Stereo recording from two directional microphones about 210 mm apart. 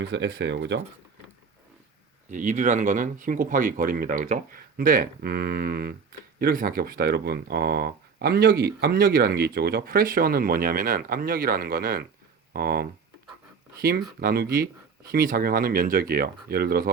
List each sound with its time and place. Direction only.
0.0 s speech: 55° right (ahead or behind)
2.3 s speech: 35° right (ahead or behind)
14.2 s speech: 45° right (ahead or behind)